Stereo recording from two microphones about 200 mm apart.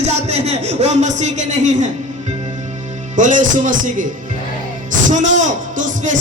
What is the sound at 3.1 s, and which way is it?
Speech, 40° right (ahead or behind).